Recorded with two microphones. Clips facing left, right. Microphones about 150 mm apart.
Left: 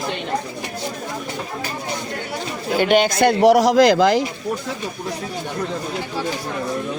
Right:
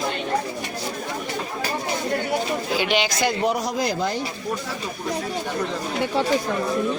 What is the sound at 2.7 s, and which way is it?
Speech, 50° left (ahead or behind).